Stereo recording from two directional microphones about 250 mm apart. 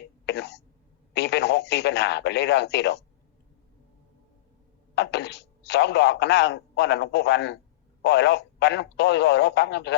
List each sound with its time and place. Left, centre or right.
0.3 s speech: left
4.9 s speech: left